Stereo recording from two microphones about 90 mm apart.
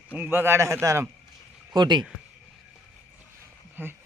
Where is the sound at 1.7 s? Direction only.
55° right (ahead or behind).